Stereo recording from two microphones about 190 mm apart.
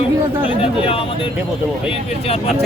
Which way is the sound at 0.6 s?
30° left (ahead or behind).